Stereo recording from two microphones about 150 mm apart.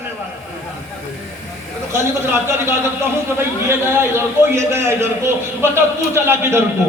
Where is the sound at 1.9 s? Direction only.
15° right (ahead or behind).